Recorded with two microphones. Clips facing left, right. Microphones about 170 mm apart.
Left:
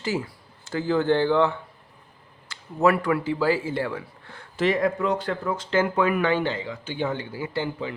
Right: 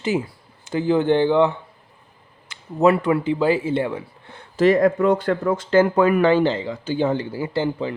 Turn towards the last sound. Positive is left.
turn(degrees=-35)  # may be behind; listen again after turning